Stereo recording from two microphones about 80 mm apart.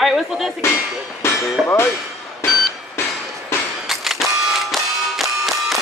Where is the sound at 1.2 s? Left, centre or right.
Left.